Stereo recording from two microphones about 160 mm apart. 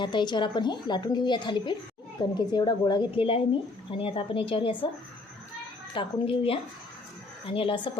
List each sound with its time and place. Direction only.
0.0 s a woman's voice: 30° left (ahead or behind)
5.9 s a woman's voice: 30° left (ahead or behind)